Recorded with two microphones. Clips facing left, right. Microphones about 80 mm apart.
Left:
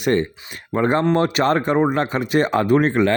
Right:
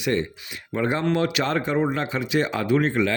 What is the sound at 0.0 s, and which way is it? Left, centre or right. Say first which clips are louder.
Speech: left 5 dB; left.